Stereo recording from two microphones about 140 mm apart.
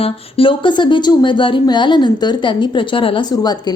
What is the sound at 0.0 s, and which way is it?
A woman's voice, 40° left (ahead or behind).